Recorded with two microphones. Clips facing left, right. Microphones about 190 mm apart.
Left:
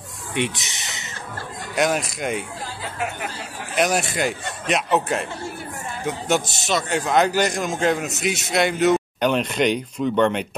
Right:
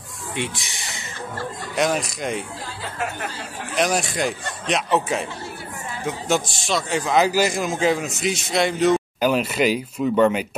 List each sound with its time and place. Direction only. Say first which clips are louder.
0.3 s speech: left 3 dB; 20° left (ahead or behind)
1.8 s a man's voice: left 1 dB; centre (ahead or behind)
3.7 s a man's voice: left 1 dB; centre (ahead or behind)